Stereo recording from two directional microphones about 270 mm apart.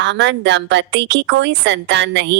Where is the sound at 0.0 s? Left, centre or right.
Right.